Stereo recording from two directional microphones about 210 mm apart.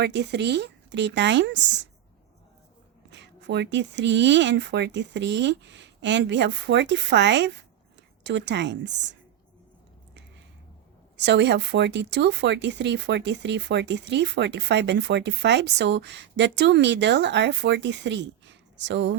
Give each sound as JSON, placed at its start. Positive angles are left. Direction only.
{"t": 0.0, "sound": "speech", "side_deg": -55}
{"t": 3.1, "sound": "speech", "side_deg": -55}
{"t": 11.2, "sound": "speech", "side_deg": -55}